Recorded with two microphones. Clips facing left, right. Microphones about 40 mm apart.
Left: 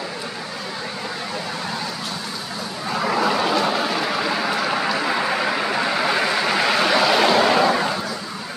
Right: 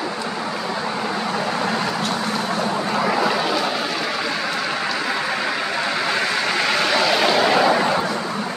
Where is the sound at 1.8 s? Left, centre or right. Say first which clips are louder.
Right 6 dB; right.